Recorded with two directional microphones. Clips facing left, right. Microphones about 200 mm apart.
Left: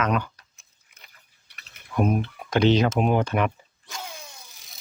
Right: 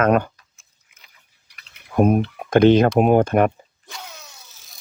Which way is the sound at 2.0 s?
50° right (ahead or behind).